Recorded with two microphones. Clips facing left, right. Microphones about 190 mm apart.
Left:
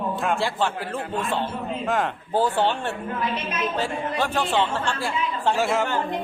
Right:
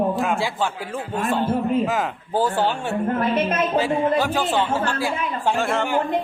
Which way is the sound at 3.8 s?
Centre (ahead or behind).